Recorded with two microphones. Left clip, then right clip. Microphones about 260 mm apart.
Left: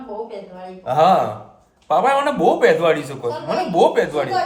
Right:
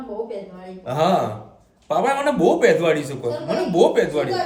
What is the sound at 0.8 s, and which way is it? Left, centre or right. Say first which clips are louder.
A man's voice: left 5 dB; centre.